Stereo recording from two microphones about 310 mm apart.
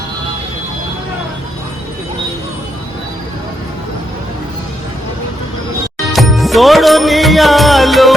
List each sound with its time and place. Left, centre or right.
6.1 s music: centre